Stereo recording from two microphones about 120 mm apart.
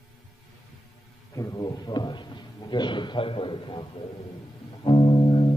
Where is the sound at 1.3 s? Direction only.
30° left (ahead or behind); by 3.8 s 45° left (ahead or behind).